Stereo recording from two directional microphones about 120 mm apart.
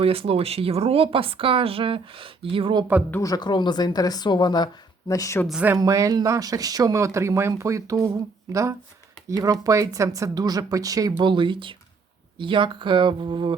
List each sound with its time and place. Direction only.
0.0 s speech: 50° right (ahead or behind)
3.1 s a woman's voice: 30° left (ahead or behind)
5.6 s speech: 25° right (ahead or behind)
11.2 s speech: 40° right (ahead or behind)